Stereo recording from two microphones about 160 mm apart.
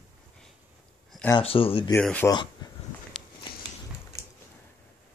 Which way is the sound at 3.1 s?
5° left (ahead or behind).